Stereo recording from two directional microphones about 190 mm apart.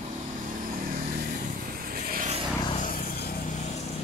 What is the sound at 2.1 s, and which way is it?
Vehicle, 40° right (ahead or behind).